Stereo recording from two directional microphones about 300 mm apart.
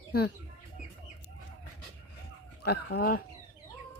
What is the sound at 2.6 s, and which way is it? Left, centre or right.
Speech, left.